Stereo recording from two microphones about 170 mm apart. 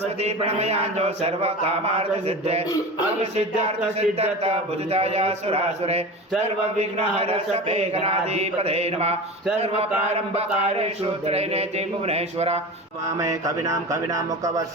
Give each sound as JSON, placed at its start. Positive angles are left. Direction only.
{"t": 0.2, "sound": "a man's voice", "side_deg": -40}
{"t": 13.1, "sound": "speech", "side_deg": -20}